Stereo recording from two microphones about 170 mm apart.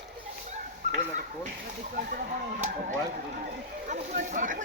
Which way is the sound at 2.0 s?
55° right (ahead or behind).